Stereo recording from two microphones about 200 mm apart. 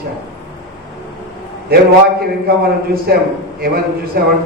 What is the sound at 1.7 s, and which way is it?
Speech, 50° right (ahead or behind).